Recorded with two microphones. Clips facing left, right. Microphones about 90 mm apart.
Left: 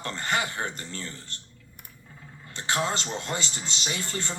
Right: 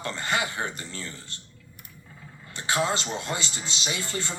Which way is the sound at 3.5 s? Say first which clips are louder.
Right 1 dB; 50° left (ahead or behind).